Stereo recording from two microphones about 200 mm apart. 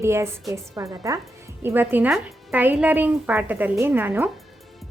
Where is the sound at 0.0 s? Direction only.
15° right (ahead or behind).